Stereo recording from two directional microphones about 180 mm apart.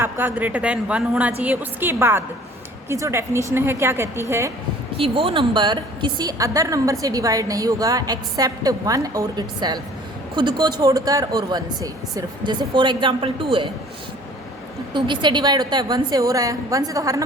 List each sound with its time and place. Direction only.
0.0 s a woman's voice: 10° right (ahead or behind)
4.9 s a woman's voice: 30° right (ahead or behind)
14.9 s a woman's voice: 25° right (ahead or behind)